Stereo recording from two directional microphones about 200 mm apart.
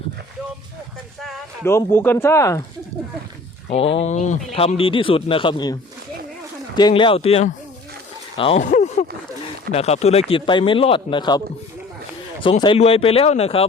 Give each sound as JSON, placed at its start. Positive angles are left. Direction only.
{"t": 1.6, "sound": "speech", "side_deg": 15}
{"t": 3.7, "sound": "speech", "side_deg": 30}
{"t": 6.7, "sound": "speech", "side_deg": 20}
{"t": 8.4, "sound": "a sound", "side_deg": 30}
{"t": 9.7, "sound": "speech", "side_deg": 30}
{"t": 12.6, "sound": "speech", "side_deg": 30}